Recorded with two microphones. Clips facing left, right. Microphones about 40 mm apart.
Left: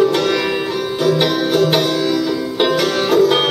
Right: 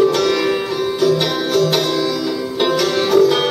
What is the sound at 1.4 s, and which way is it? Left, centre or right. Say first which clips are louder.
Music: right 1 dB; centre.